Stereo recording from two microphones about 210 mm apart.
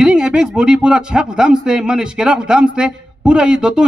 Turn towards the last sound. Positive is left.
turn(degrees=-5)  # may be behind; listen again after turning